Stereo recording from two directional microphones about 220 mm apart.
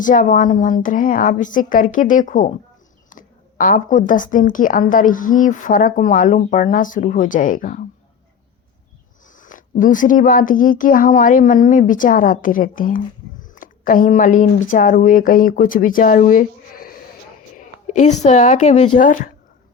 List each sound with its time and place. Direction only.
0.0 s speech: 35° left (ahead or behind)
9.3 s a woman's voice: 35° left (ahead or behind)